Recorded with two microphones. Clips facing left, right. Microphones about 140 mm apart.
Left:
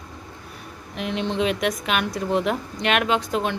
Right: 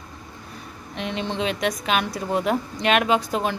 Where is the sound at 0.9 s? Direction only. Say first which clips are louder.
Left 2 dB; 5° left (ahead or behind).